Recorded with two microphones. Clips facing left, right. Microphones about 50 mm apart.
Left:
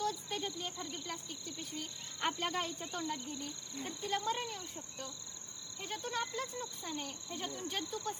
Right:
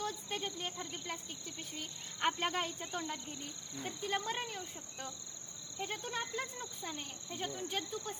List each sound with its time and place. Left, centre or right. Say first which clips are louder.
0.0 s cricket: left 2 dB; right
2.1 s speech: right 2 dB; right
6.8 s speech: left 2 dB; centre